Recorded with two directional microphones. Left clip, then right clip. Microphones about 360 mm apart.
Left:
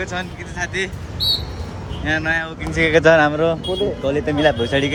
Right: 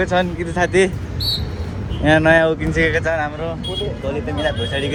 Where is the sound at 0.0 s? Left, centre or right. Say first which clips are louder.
Right 8 dB; centre.